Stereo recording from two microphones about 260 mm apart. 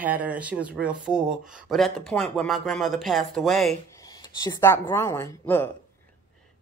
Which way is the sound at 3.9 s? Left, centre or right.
Centre.